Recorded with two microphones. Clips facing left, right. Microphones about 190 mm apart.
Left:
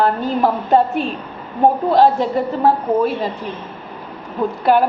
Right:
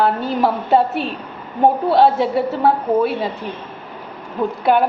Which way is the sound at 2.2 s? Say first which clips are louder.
Even; 5° right (ahead or behind).